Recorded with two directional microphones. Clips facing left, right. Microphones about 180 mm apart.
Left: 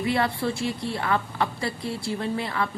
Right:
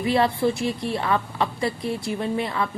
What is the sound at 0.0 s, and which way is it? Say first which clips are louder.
A woman's voice: right 4 dB; 20° right (ahead or behind).